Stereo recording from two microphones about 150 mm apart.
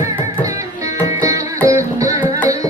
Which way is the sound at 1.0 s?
20° right (ahead or behind).